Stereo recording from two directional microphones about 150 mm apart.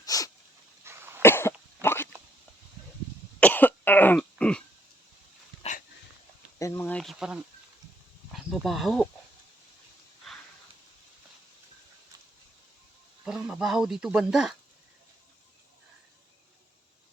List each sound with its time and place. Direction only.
0.0 s dog: 25° left (ahead or behind)
0.9 s cough: 15° right (ahead or behind)
1.2 s cough: 15° left (ahead or behind)
1.8 s dog: 15° left (ahead or behind)
3.4 s cough: 10° left (ahead or behind)
6.6 s speech: 15° left (ahead or behind); by 9.0 s centre (ahead or behind)
13.2 s speech: 5° right (ahead or behind)